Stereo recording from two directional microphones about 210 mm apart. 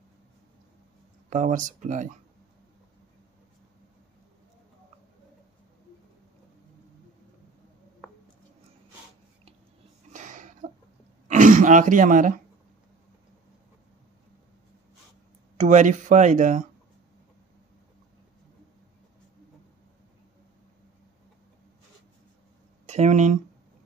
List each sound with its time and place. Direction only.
1.3 s speech: 35° right (ahead or behind)
10.1 s a sound: 35° right (ahead or behind)
11.2 s speech: 35° right (ahead or behind)
15.5 s speech: 35° right (ahead or behind)
22.8 s speech: 30° right (ahead or behind)